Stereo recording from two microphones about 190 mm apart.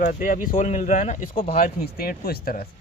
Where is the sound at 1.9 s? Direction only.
50° left (ahead or behind).